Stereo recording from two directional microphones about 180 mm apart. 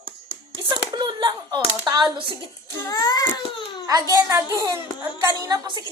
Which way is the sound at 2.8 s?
20° left (ahead or behind).